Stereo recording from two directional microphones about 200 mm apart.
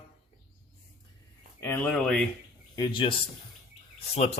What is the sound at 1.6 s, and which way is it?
Speech, 10° left (ahead or behind).